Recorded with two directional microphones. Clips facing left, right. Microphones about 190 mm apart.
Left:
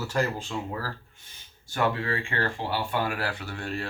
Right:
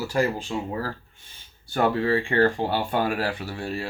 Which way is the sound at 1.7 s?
35° right (ahead or behind).